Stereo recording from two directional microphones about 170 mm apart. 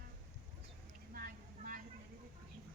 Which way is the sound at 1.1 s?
55° right (ahead or behind).